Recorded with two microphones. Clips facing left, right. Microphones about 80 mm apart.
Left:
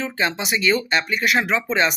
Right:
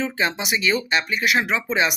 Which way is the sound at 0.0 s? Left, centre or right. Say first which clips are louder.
Even; centre.